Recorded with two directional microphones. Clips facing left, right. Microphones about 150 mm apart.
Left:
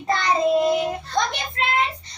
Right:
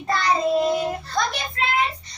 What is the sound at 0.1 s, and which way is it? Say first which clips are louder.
Child singing: left 1 dB; 20° left (ahead or behind).